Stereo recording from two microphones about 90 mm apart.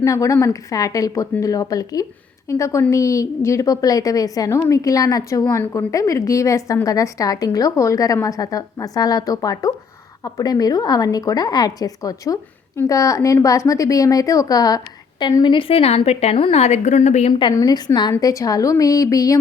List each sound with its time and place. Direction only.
0.0 s a woman's voice: 35° left (ahead or behind)
15.2 s a woman's voice: 55° left (ahead or behind)
15.5 s a woman's voice: 90° left
17.5 s a woman's voice: 35° left (ahead or behind)
17.7 s speech: 55° left (ahead or behind)
18.2 s a woman's voice: 40° left (ahead or behind)